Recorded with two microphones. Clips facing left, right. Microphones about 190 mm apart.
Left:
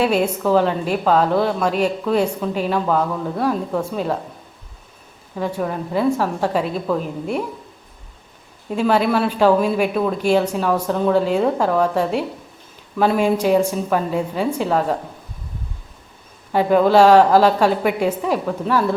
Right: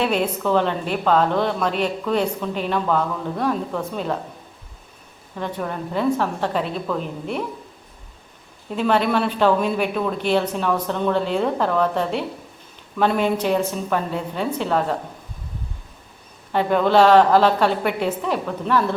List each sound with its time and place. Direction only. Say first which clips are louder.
0.0 s a woman's voice: left 3 dB; 10° left (ahead or behind)
5.4 s a woman's voice: left 4 dB; 10° left (ahead or behind)
8.7 s a woman's voice: left 2 dB; 5° left (ahead or behind)
16.5 s a woman's voice: left 4 dB; 10° left (ahead or behind)